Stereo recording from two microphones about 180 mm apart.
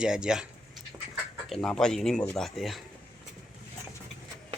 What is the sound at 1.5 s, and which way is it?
Speech, 5° left (ahead or behind).